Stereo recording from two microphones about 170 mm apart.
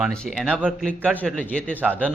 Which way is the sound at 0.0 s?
5° left (ahead or behind).